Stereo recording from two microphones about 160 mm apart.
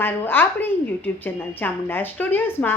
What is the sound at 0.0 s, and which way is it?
A woman's voice, 15° left (ahead or behind).